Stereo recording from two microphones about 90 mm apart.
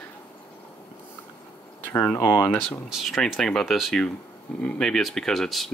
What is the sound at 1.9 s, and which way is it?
Speech, 30° left (ahead or behind).